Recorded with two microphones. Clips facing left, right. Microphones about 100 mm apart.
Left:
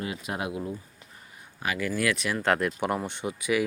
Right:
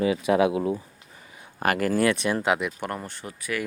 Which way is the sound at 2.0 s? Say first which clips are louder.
Right 3 dB; 25° right (ahead or behind).